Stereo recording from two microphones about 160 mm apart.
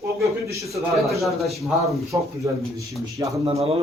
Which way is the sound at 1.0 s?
Centre (ahead or behind).